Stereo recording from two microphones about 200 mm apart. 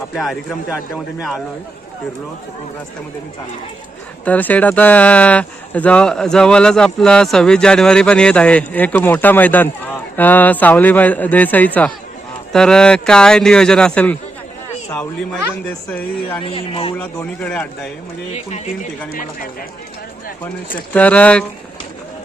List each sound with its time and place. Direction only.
0.2 s speech: centre (ahead or behind)
4.3 s speech: 10° left (ahead or behind)
15.6 s speech: 5° left (ahead or behind)
16.4 s speech: 25° left (ahead or behind)
17.0 s speech: 5° left (ahead or behind)
18.3 s speech: 35° left (ahead or behind)
20.9 s speech: 5° left (ahead or behind)